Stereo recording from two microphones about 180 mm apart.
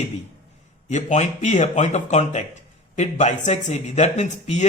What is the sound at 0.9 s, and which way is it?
Speech, 40° left (ahead or behind).